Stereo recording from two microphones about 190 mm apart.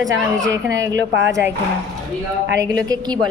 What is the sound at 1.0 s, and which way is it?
Speech, 70° right (ahead or behind).